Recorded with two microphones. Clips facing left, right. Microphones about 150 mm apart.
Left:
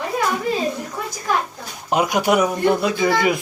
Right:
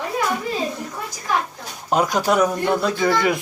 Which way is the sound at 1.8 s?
10° left (ahead or behind).